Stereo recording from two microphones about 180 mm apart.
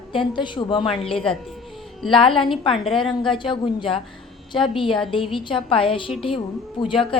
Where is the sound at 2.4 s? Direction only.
30° left (ahead or behind).